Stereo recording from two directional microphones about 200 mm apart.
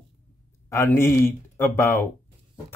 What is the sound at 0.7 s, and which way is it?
Speech, 15° left (ahead or behind).